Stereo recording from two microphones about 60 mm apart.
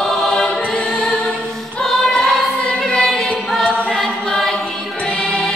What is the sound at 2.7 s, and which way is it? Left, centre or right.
Choir, left.